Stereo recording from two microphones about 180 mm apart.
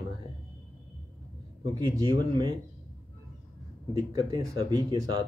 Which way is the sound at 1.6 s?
25° right (ahead or behind).